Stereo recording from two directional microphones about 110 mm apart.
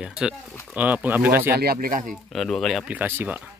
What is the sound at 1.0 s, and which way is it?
Speech, 15° right (ahead or behind).